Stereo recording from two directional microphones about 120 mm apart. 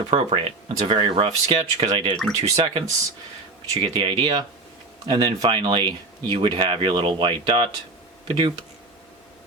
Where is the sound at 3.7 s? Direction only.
45° right (ahead or behind).